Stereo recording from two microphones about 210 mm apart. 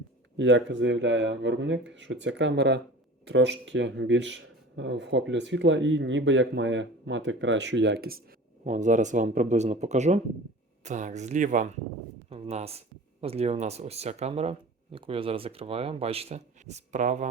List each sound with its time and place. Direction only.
0.3 s speech: 60° right (ahead or behind)
8.6 s speech: 35° right (ahead or behind)